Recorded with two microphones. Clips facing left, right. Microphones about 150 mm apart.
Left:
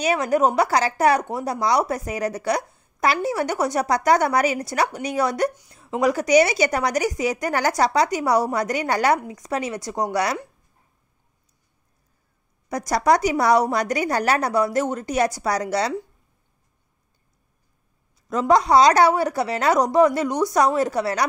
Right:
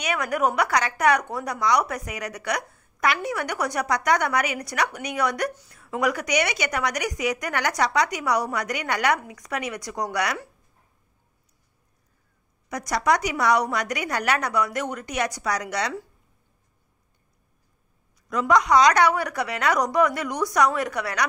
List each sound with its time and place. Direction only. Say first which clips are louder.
0.0 s speech: left 5 dB; 30° left (ahead or behind)
5.5 s a woman's voice: right 3 dB; 15° left (ahead or behind)
5.8 s speech: left 4 dB; 25° left (ahead or behind)
12.6 s speech: left 4 dB; 30° left (ahead or behind)
18.3 s a woman's voice: left 3 dB; 30° left (ahead or behind)